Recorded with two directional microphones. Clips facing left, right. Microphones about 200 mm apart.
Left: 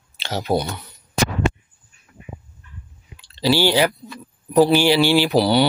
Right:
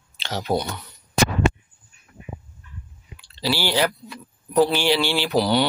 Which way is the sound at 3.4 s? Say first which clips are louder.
Left 5 dB; 20° left (ahead or behind).